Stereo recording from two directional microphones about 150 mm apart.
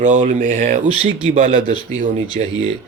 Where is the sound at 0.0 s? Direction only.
60° right (ahead or behind).